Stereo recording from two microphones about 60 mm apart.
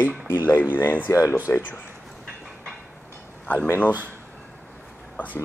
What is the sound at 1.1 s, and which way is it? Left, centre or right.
Speech, left.